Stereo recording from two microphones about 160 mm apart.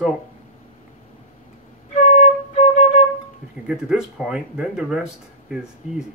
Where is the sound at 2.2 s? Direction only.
45° left (ahead or behind).